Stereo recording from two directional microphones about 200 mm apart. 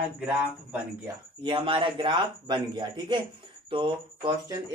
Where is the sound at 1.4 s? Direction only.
25° right (ahead or behind).